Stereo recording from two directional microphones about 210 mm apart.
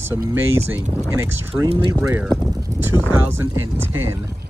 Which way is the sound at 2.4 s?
15° right (ahead or behind).